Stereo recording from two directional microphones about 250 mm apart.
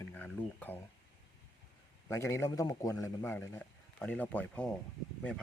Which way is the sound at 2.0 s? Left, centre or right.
Centre.